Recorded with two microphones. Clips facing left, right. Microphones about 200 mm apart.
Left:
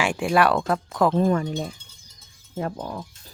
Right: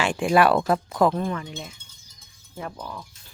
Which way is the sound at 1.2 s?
40° left (ahead or behind).